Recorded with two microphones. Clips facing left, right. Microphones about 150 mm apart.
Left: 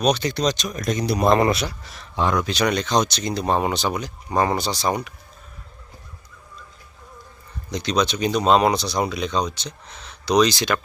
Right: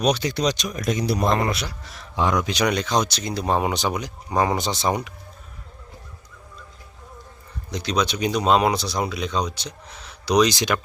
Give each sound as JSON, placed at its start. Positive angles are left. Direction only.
{"t": 0.0, "sound": "speech", "side_deg": -10}
{"t": 1.4, "sound": "a man's voice", "side_deg": 25}
{"t": 2.3, "sound": "speech", "side_deg": -15}
{"t": 7.7, "sound": "speech", "side_deg": -5}